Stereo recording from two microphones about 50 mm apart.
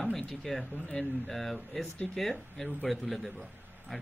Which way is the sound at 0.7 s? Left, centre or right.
Left.